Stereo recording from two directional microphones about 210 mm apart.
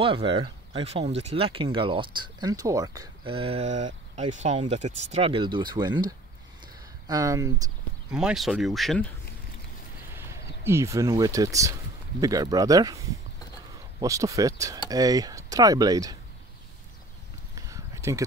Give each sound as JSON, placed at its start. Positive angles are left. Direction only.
{"t": 0.0, "sound": "speech", "side_deg": -25}
{"t": 8.1, "sound": "speech", "side_deg": -5}
{"t": 10.1, "sound": "speech", "side_deg": -10}
{"t": 17.6, "sound": "a sound", "side_deg": -15}